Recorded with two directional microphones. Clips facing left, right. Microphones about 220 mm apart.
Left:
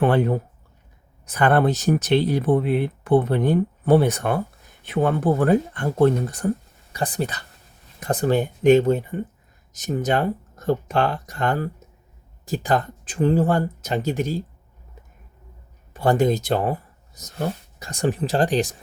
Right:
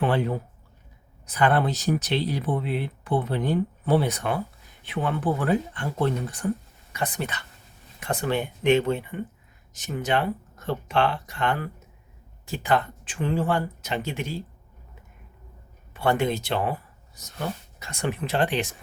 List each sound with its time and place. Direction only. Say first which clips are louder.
0.0 s speech: left 5 dB; 50° left (ahead or behind)
15.9 s speech: left 5 dB; 35° left (ahead or behind)